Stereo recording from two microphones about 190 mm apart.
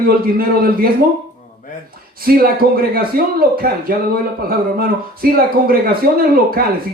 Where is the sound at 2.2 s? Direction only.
50° right (ahead or behind).